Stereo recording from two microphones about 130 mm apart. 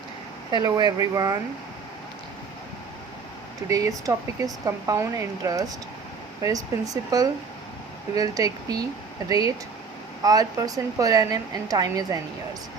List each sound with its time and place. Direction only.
0.5 s speech: 35° right (ahead or behind)
3.7 s speech: 25° right (ahead or behind)